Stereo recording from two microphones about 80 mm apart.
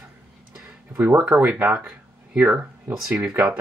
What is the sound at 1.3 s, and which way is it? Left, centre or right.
Speech, centre.